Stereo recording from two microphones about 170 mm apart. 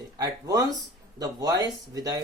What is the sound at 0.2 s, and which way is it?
Speech, 20° right (ahead or behind).